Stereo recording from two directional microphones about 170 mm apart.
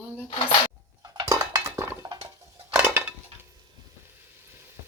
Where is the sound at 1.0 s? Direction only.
20° right (ahead or behind).